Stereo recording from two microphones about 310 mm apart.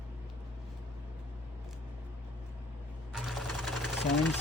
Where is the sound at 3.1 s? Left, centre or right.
Centre.